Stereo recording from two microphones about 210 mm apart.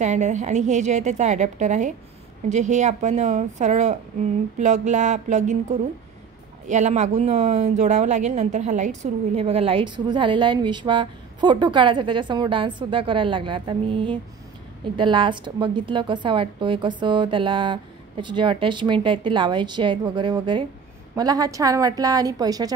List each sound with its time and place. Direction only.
0.0 s a woman's voice: 35° right (ahead or behind); by 22.7 s 15° right (ahead or behind)